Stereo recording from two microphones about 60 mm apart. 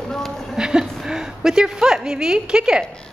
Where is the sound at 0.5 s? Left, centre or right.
Centre.